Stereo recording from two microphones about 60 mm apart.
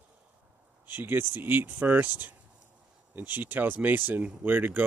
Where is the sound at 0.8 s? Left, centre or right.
Right.